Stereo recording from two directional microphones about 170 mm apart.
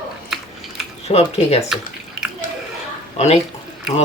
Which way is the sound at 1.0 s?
35° left (ahead or behind).